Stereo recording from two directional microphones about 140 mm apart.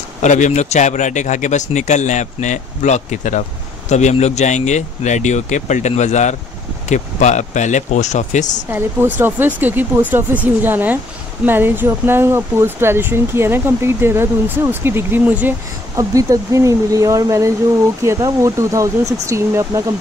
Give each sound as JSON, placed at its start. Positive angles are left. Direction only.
{"t": 0.2, "sound": "speech", "side_deg": 60}
{"t": 8.6, "sound": "speech", "side_deg": -15}
{"t": 16.0, "sound": "speech", "side_deg": -25}